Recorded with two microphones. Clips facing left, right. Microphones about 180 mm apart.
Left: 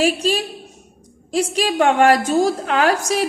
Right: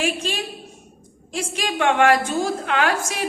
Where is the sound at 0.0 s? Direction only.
35° left (ahead or behind).